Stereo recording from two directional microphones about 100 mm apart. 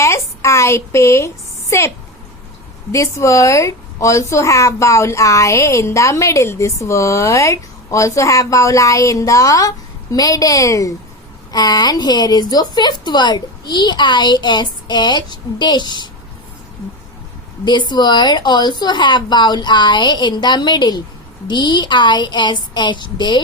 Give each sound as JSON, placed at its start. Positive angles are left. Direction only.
{"t": 0.0, "sound": "a sound", "side_deg": 30}
{"t": 2.9, "sound": "a woman's voice", "side_deg": 30}
{"t": 17.7, "sound": "a woman's voice", "side_deg": 50}